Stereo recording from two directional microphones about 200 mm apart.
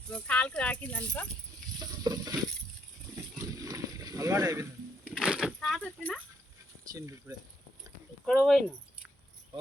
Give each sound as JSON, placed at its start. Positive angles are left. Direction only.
{"t": 0.1, "sound": "speech", "side_deg": 5}
{"t": 1.8, "sound": "frying", "side_deg": -20}
{"t": 3.3, "sound": "a sound", "side_deg": -15}
{"t": 5.0, "sound": "a sound", "side_deg": -5}
{"t": 6.9, "sound": "speech", "side_deg": -15}
{"t": 8.2, "sound": "speech", "side_deg": 0}